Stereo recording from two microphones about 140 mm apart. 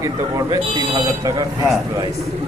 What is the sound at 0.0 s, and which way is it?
Speech, 25° right (ahead or behind).